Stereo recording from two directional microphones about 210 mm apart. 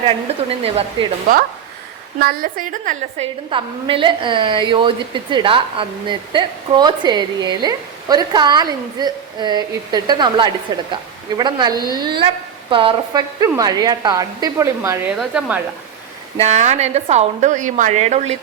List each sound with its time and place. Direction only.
0.6 s a woman's voice: 25° right (ahead or behind)
2.2 s a woman's voice: 45° right (ahead or behind)
3.5 s a woman's voice: 25° right (ahead or behind)
15.2 s a woman's voice: 5° right (ahead or behind)
16.4 s a woman's voice: 35° right (ahead or behind)